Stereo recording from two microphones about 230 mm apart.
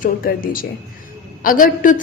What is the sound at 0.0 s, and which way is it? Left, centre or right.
A woman's voice, left.